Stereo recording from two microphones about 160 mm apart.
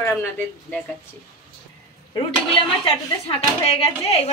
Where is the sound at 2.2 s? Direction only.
35° left (ahead or behind).